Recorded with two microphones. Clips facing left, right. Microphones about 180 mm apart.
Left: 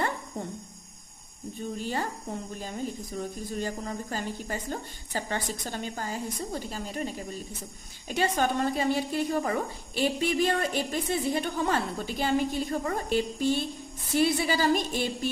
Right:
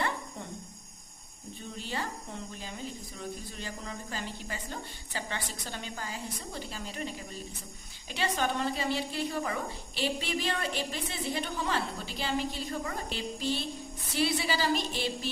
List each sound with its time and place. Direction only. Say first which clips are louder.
1.8 s a woman's voice: left 3 dB; 45° left (ahead or behind)